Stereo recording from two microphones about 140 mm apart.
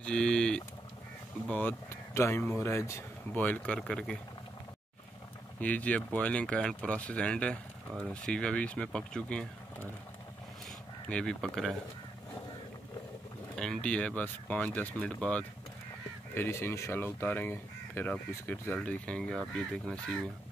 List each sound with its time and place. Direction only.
0.0 s a sound: 5° left (ahead or behind)
1.5 s speech: 15° left (ahead or behind)
5.6 s speech: 10° left (ahead or behind)
11.1 s speech: 5° left (ahead or behind)
13.6 s speech: 5° left (ahead or behind)